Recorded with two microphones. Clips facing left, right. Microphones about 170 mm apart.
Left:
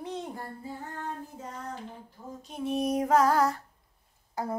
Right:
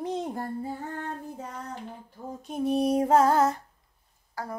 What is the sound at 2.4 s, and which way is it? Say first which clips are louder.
Female singing: right 4 dB; 45° right (ahead or behind).